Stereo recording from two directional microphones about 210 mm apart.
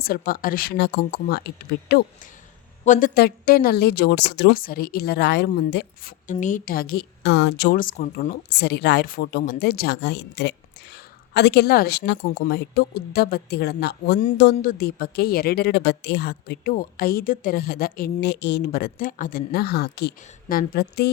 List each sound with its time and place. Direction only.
0.0 s a woman's voice: 45° left (ahead or behind)
2.8 s a woman's voice: 40° left (ahead or behind)